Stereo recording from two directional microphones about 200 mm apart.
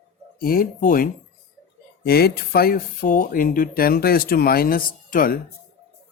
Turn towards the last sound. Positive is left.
turn(degrees=45)  # may be behind; listen again after turning